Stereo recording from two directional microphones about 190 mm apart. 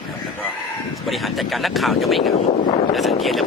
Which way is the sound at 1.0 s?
Centre (ahead or behind).